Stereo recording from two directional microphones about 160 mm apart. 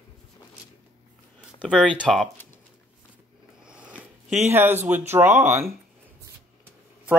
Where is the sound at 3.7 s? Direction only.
5° right (ahead or behind).